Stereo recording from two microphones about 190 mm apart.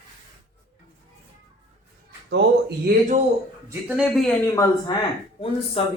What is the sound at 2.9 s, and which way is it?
Speech, 45° right (ahead or behind).